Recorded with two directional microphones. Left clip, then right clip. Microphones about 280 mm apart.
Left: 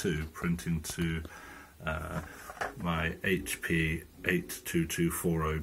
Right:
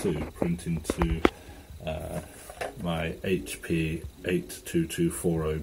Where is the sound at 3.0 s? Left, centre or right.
Centre.